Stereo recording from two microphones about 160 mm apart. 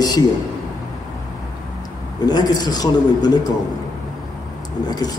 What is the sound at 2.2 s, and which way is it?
Speech, 25° left (ahead or behind).